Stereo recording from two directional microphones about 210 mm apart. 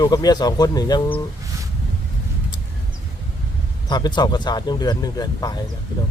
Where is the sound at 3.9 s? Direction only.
20° left (ahead or behind).